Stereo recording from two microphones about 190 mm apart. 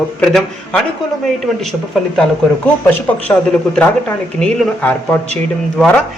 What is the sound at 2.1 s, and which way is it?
Speech, 5° left (ahead or behind).